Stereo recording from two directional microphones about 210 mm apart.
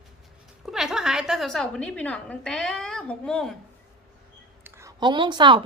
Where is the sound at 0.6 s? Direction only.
Centre (ahead or behind).